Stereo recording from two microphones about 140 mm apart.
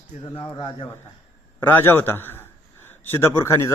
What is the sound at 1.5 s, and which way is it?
A man's voice, 15° left (ahead or behind).